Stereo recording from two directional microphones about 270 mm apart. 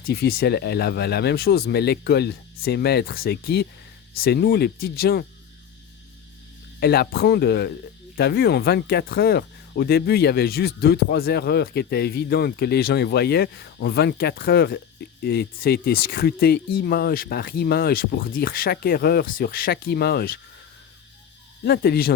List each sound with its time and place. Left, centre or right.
0.0 s speech: left
6.7 s speech: left
21.6 s speech: left